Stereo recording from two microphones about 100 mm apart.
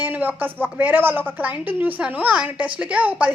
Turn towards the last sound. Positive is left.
turn(degrees=-15)  # may be behind; listen again after turning